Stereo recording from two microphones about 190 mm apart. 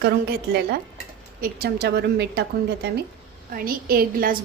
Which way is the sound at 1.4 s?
55° right (ahead or behind).